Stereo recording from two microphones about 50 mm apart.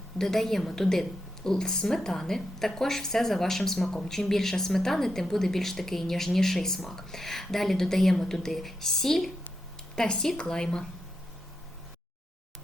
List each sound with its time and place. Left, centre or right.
0.2 s a woman's voice: centre
9.9 s a woman's voice: centre